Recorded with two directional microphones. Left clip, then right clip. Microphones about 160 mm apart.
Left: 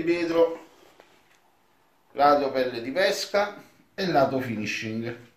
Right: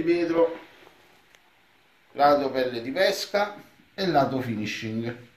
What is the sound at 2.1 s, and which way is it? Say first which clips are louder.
Speech: even; 25° left (ahead or behind).